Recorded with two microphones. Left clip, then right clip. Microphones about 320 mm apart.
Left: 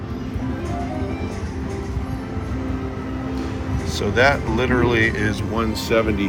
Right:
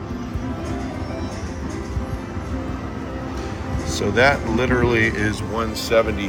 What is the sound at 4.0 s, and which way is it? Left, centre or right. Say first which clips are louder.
Speech: even; centre.